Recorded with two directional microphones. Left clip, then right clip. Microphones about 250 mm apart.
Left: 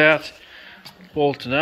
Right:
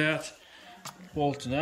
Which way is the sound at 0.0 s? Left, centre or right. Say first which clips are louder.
Left 13 dB; centre.